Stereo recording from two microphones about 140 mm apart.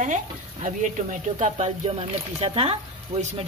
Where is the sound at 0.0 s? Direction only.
60° right (ahead or behind).